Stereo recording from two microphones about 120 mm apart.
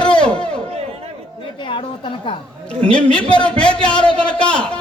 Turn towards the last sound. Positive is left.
turn(degrees=10)  # may be behind; listen again after turning